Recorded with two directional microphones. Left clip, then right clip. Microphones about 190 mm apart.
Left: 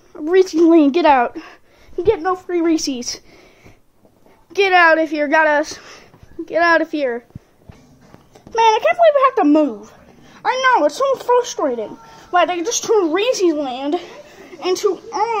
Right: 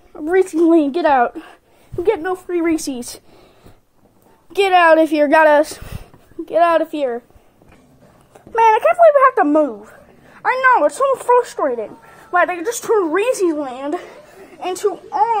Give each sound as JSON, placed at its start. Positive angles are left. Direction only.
{"t": 0.2, "sound": "speech", "side_deg": 0}
{"t": 1.2, "sound": "speech", "side_deg": 0}
{"t": 2.0, "sound": "a woman's voice", "side_deg": -15}
{"t": 4.5, "sound": "a woman's voice", "side_deg": -10}
{"t": 4.9, "sound": "speech", "side_deg": -25}
{"t": 6.5, "sound": "speech", "side_deg": 0}
{"t": 8.5, "sound": "speech", "side_deg": 10}